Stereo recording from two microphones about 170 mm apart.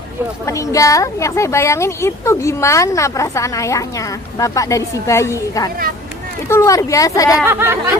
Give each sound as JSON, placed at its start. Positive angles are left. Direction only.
{"t": 0.4, "sound": "a woman's voice", "side_deg": 20}
{"t": 7.4, "sound": "speech", "side_deg": -15}